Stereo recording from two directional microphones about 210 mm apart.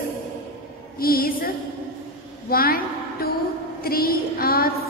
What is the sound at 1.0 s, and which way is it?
Speech, 45° left (ahead or behind).